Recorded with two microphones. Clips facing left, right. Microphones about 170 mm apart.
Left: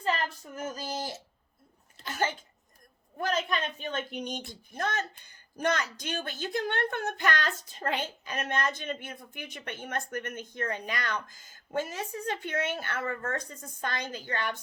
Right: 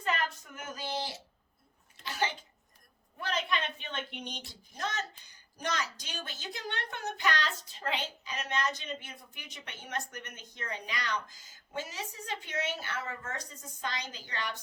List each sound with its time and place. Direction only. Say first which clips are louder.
0.0 s speech: left 3 dB; 30° left (ahead or behind)
2.0 s sneeze: left 3 dB; 45° left (ahead or behind)
3.2 s speech: left 4 dB; 45° left (ahead or behind)